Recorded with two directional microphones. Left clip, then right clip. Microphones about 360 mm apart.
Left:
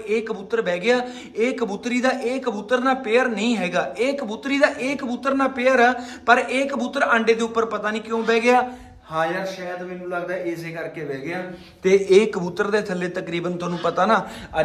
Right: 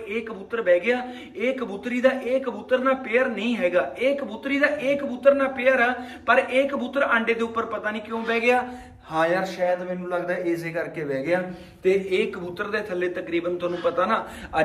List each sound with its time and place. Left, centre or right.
0.1 s a man's voice: centre
9.1 s a man's voice: centre
11.8 s a man's voice: centre